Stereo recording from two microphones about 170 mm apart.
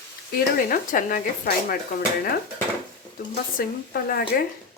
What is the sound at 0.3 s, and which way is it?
Speech, 55° left (ahead or behind).